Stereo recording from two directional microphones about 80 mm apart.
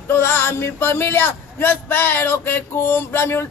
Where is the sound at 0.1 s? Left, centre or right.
Left.